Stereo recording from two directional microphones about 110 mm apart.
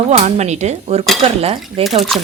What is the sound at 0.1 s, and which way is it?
Speech, 90° right.